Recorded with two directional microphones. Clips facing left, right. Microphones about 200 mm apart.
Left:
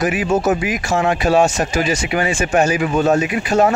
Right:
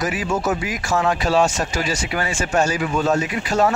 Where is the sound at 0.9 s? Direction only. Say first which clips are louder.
Left 3 dB; 25° left (ahead or behind).